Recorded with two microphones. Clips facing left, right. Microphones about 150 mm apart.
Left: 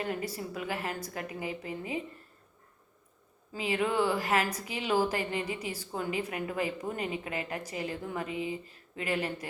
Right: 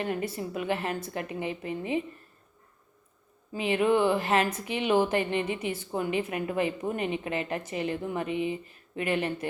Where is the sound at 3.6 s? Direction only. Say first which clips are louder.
Right 5 dB; 25° right (ahead or behind).